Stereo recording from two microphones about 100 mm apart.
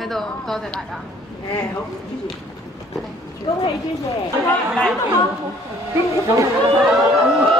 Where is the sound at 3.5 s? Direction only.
65° left (ahead or behind).